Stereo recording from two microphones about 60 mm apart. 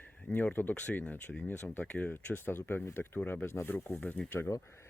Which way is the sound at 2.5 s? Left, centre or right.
Left.